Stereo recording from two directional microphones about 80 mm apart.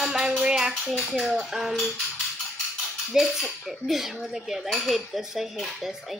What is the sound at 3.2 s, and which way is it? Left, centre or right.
Dishes, centre.